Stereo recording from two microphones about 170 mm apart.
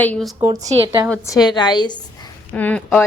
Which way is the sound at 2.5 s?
10° left (ahead or behind).